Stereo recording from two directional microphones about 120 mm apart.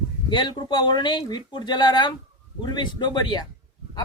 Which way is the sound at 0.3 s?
40° left (ahead or behind).